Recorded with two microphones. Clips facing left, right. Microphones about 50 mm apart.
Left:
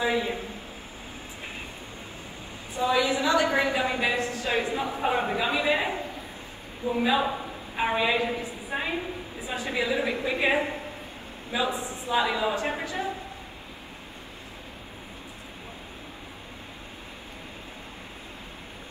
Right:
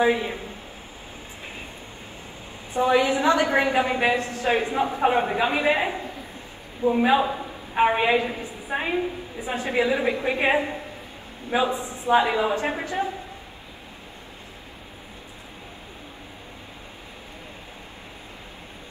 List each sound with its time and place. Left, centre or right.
0.0 s a woman's voice: right
2.7 s a woman's voice: right
5.0 s a woman's voice: right
7.0 s a woman's voice: right
8.6 s a woman's voice: right
9.4 s a woman's voice: right